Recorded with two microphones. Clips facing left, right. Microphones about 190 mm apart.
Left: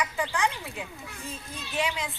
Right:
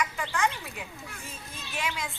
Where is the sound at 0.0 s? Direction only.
15° left (ahead or behind).